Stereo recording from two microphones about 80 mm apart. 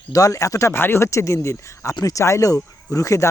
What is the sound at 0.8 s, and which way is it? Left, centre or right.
Speech, left.